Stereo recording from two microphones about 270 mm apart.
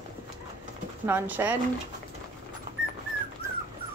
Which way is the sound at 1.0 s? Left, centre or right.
Centre.